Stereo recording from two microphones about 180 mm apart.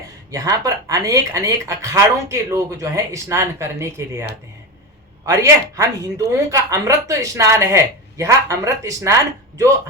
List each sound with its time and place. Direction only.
0.3 s speech: 20° right (ahead or behind)